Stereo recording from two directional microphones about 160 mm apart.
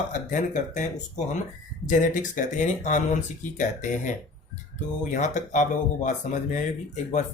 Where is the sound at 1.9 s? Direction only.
50° left (ahead or behind).